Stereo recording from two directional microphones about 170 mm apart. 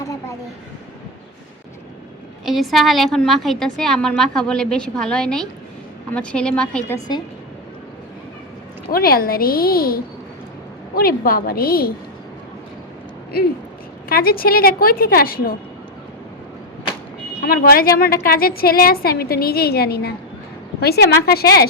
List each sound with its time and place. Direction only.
0.0 s a sound: 20° left (ahead or behind)
2.4 s a woman's voice: centre (ahead or behind)
8.9 s a woman's voice: 60° left (ahead or behind)
14.1 s a woman's voice: 60° left (ahead or behind)
17.4 s a woman's voice: 60° left (ahead or behind)